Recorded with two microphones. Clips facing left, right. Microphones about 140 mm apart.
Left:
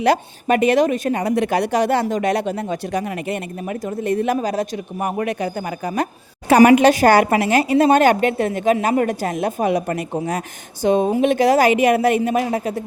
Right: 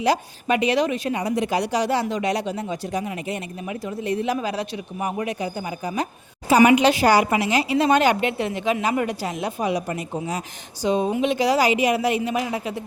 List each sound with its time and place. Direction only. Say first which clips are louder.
0.0 s speech: left 4 dB; 55° left (ahead or behind)
6.6 s speech: left 5 dB; 45° left (ahead or behind)